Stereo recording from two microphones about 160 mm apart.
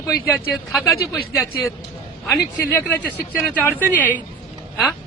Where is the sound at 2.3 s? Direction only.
15° left (ahead or behind).